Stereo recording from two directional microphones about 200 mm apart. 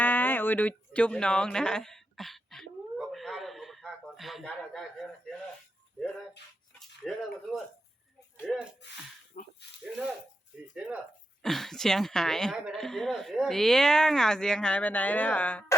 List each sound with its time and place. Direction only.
0.0 s a sound: 10° left (ahead or behind)
6.7 s a woman's voice: centre (ahead or behind)
9.4 s speech: 40° left (ahead or behind)
11.4 s a woman's voice: centre (ahead or behind)